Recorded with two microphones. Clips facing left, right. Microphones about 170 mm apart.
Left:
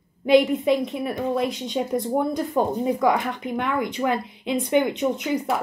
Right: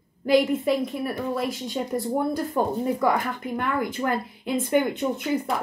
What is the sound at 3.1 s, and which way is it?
A woman's voice, centre (ahead or behind).